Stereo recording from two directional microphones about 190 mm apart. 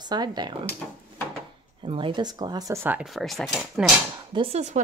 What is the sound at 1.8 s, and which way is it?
Speech, 25° right (ahead or behind).